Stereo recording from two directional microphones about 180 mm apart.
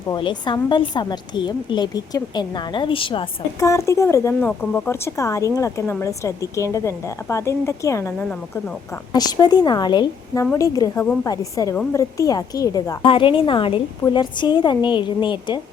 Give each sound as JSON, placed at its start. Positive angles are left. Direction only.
{"t": 0.1, "sound": "a woman's voice", "side_deg": 25}
{"t": 3.7, "sound": "a woman's voice", "side_deg": 15}
{"t": 8.2, "sound": "a woman's voice", "side_deg": 5}
{"t": 9.1, "sound": "a woman's voice", "side_deg": 20}